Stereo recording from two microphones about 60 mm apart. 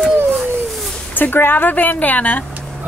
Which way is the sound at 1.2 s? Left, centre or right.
Left.